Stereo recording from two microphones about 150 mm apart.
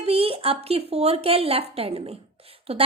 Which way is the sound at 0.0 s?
40° right (ahead or behind).